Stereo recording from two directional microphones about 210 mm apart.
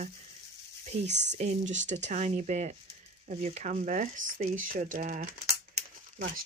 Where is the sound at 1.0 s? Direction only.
55° right (ahead or behind).